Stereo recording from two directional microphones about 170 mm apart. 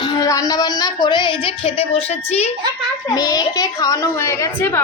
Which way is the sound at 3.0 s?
20° left (ahead or behind).